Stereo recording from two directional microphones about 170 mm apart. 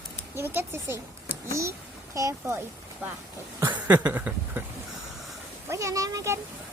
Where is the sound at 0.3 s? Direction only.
15° right (ahead or behind).